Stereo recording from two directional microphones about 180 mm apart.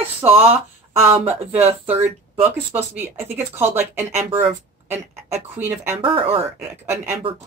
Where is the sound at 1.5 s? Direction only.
35° right (ahead or behind).